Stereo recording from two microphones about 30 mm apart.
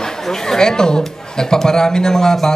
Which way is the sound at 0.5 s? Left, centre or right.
Left.